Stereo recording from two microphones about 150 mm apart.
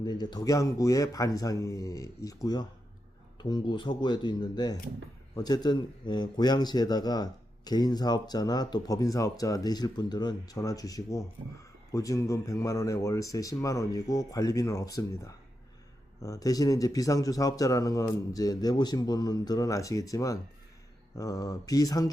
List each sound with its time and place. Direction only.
0.0 s speech: 30° left (ahead or behind)